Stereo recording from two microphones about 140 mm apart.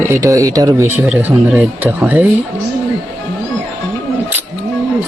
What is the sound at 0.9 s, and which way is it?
Speech, 10° right (ahead or behind).